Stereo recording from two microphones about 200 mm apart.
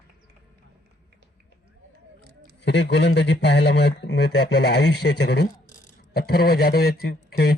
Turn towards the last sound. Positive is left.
turn(degrees=50)  # may be behind; listen again after turning